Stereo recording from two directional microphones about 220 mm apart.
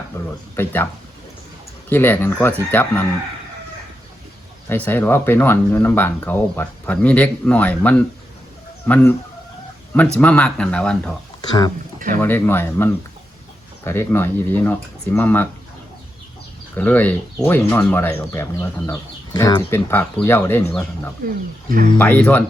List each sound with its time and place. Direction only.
0.1 s a sound: 10° left (ahead or behind)
0.5 s speech: 10° left (ahead or behind)
1.9 s speech: 10° left (ahead or behind)
4.7 s speech: 10° left (ahead or behind)
10.2 s speech: 5° left (ahead or behind)
11.9 s a sound: 40° right (ahead or behind)
12.2 s speech: 10° left (ahead or behind)
16.7 s speech: 5° left (ahead or behind)
21.7 s speech: 40° right (ahead or behind)
21.9 s speech: 10° left (ahead or behind)